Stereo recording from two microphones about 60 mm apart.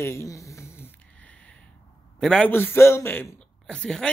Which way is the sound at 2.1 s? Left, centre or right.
Centre.